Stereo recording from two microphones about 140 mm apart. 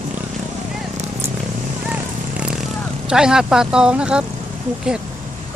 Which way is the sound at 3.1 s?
5° right (ahead or behind).